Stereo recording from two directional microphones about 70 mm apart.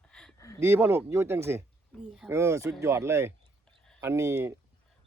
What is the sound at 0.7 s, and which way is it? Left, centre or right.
Speech, right.